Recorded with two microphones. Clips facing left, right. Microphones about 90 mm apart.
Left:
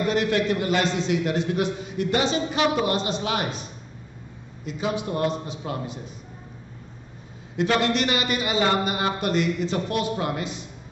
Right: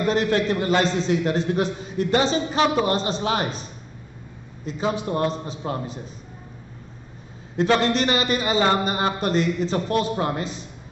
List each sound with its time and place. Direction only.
0.0 s a man's voice: 35° right (ahead or behind)
4.6 s a man's voice: 35° right (ahead or behind)
7.5 s a man's voice: 35° right (ahead or behind)